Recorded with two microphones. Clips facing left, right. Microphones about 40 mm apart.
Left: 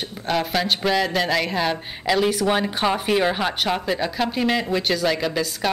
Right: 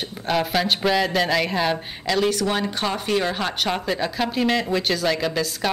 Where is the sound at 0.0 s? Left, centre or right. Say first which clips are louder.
Right 1 dB; centre.